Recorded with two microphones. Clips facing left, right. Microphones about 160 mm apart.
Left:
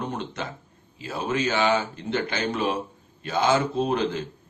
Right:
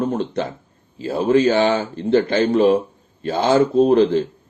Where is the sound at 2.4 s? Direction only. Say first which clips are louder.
Right 11 dB; 35° right (ahead or behind).